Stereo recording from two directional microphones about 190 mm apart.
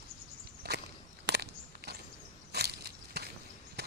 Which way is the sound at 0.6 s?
60° right (ahead or behind).